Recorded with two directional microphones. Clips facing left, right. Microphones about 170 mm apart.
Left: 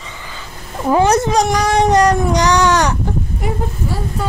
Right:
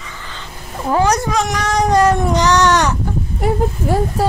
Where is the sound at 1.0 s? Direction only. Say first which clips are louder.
Left 3 dB; 25° left (ahead or behind).